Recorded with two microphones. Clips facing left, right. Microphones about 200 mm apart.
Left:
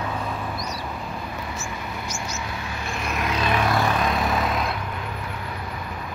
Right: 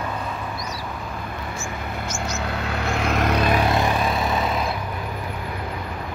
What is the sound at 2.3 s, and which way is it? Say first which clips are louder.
Vehicle: right 5 dB; 65° right (ahead or behind).